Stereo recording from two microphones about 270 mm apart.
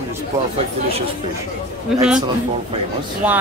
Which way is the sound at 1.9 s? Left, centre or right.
Centre.